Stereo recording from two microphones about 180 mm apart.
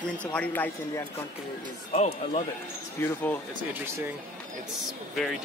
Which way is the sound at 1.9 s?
35° left (ahead or behind).